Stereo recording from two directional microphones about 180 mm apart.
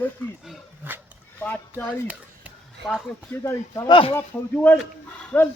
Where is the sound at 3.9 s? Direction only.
30° left (ahead or behind).